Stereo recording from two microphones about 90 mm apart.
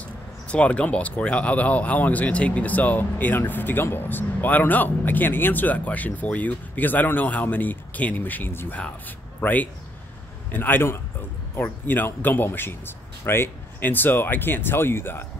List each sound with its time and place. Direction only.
0.5 s a man's voice: 15° left (ahead or behind)